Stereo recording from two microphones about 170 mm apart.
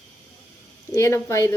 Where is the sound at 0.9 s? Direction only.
15° left (ahead or behind).